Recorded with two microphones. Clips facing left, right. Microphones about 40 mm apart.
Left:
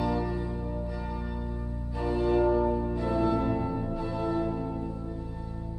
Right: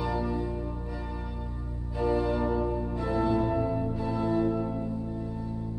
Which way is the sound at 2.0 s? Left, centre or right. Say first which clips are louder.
Left 1 dB; centre.